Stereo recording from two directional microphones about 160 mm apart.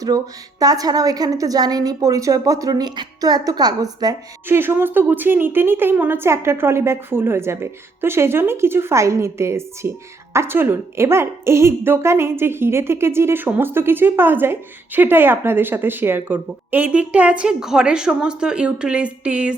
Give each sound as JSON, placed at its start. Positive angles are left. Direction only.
{"t": 0.6, "sound": "a woman's voice", "side_deg": -25}